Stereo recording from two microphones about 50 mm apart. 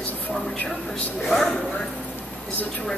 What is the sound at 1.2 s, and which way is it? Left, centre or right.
Speech, centre.